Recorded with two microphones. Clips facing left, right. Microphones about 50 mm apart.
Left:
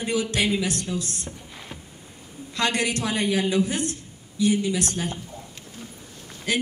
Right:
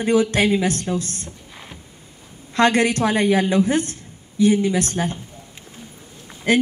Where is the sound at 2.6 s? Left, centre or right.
Right.